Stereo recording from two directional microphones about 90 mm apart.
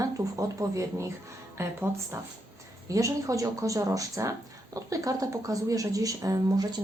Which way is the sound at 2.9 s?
40° right (ahead or behind).